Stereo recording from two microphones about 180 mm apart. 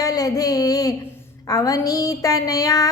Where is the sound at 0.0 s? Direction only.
20° left (ahead or behind).